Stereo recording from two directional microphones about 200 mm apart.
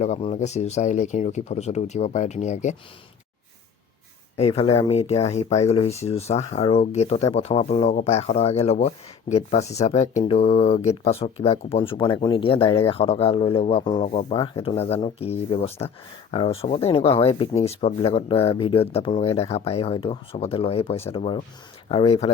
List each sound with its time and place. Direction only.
0.0 s speech: 35° left (ahead or behind)
4.4 s speech: 30° left (ahead or behind)